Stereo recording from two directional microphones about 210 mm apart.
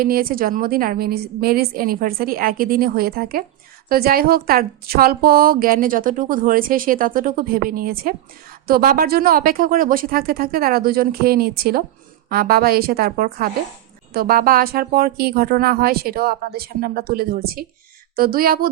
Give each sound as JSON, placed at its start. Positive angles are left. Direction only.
{"t": 0.0, "sound": "a woman's voice", "side_deg": -45}